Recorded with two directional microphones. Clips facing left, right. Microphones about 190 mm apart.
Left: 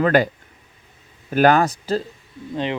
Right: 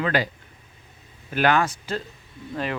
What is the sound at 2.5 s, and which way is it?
Speech, 20° left (ahead or behind).